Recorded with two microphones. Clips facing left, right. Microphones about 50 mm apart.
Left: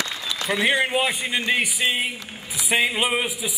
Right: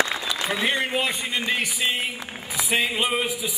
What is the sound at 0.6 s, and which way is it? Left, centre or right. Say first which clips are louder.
A man's voice: left 4 dB; centre.